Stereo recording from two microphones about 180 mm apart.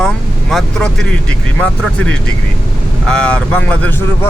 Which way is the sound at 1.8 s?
5° left (ahead or behind).